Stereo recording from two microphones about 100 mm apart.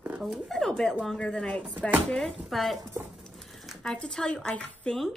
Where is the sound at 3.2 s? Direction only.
Centre (ahead or behind).